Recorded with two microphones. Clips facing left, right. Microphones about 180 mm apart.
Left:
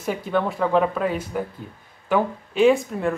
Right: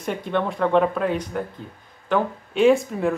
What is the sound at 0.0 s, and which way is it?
Speech, 5° left (ahead or behind).